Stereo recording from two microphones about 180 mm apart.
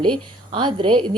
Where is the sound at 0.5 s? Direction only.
30° right (ahead or behind).